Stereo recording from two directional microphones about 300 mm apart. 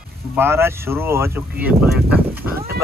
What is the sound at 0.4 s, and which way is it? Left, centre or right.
Speech, centre.